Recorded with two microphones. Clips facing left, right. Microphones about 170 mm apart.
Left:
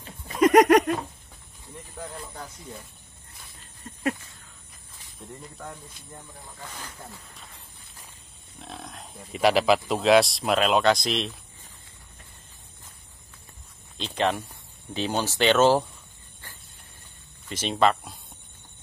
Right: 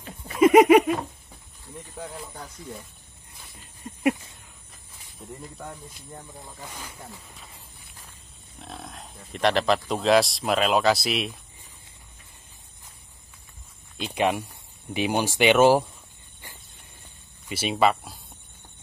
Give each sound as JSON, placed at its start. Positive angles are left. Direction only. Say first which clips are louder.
{"t": 0.4, "sound": "a sound", "louder": "right 2 dB", "side_deg": -5}
{"t": 2.0, "sound": "speech", "louder": "even", "side_deg": -5}
{"t": 3.8, "sound": "a sound", "louder": "right 5 dB", "side_deg": -15}
{"t": 5.2, "sound": "speech", "louder": "right 2 dB", "side_deg": -5}
{"t": 6.4, "sound": "speech", "louder": "right 1 dB", "side_deg": -15}
{"t": 8.5, "sound": "speech", "louder": "even", "side_deg": 0}
{"t": 13.9, "sound": "speech", "louder": "right 1 dB", "side_deg": -10}
{"t": 17.5, "sound": "speech", "louder": "right 1 dB", "side_deg": -10}